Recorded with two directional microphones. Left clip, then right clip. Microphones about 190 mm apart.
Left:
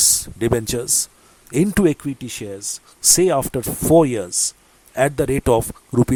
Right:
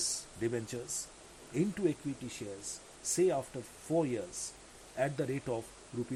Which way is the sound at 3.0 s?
45° left (ahead or behind).